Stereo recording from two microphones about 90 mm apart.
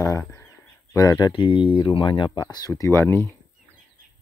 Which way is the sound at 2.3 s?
45° left (ahead or behind).